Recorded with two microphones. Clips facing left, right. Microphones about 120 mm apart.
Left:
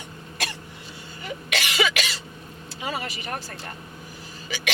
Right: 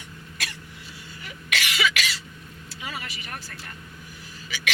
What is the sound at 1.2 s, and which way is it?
Cough, 30° left (ahead or behind).